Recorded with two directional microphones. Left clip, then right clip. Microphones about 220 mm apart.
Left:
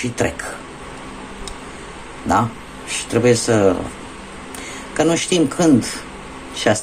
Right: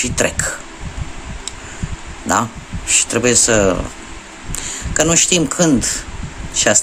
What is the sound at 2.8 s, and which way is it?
Speech, 25° right (ahead or behind).